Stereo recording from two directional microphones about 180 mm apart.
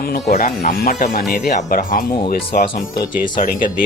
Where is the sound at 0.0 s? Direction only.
55° left (ahead or behind).